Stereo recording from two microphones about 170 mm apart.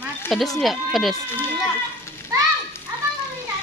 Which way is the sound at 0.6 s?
Centre (ahead or behind).